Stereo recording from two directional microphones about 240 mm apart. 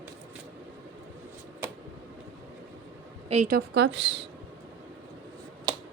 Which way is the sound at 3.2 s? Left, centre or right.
Right.